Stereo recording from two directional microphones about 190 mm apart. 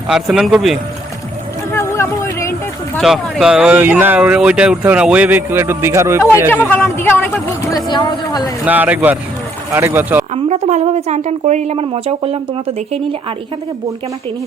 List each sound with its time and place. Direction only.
0.1 s speech: 5° right (ahead or behind)
1.7 s a sound: 15° left (ahead or behind)
3.0 s speech: centre (ahead or behind)
6.7 s speech: 10° left (ahead or behind)
8.6 s speech: 10° right (ahead or behind)
10.3 s a woman's voice: 35° right (ahead or behind)